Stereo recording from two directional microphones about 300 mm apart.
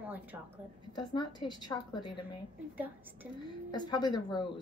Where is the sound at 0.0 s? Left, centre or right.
Centre.